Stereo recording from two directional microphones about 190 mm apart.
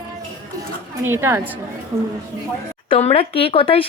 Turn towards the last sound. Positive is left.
turn(degrees=30)  # may be behind; listen again after turning